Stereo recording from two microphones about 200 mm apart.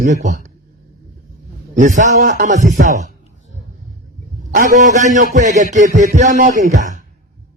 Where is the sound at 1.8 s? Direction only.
40° right (ahead or behind).